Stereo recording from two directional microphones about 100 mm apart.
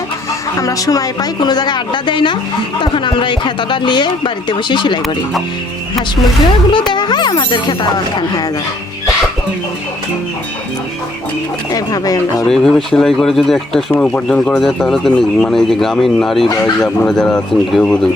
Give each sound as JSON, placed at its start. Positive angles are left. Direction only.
{"t": 0.6, "sound": "speech", "side_deg": 35}
{"t": 6.7, "sound": "speech", "side_deg": 50}
{"t": 11.7, "sound": "speech", "side_deg": 40}
{"t": 12.5, "sound": "speech", "side_deg": 5}